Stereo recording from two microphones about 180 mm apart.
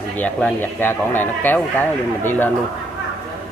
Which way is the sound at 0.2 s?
10° left (ahead or behind).